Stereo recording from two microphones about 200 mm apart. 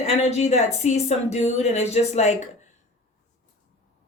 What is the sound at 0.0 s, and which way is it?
A woman's voice, 35° left (ahead or behind).